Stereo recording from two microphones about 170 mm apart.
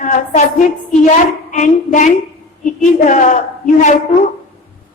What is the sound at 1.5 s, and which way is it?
A woman's voice, 45° left (ahead or behind).